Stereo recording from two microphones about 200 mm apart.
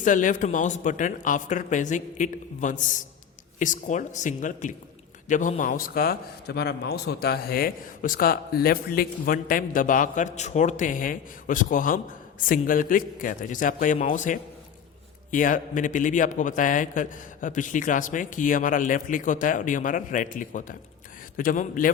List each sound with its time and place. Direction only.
0.0 s a man's voice: 40° left (ahead or behind)